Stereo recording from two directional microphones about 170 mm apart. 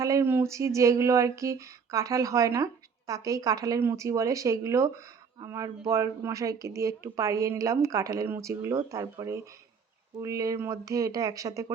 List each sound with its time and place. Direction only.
0.0 s speech: 15° right (ahead or behind)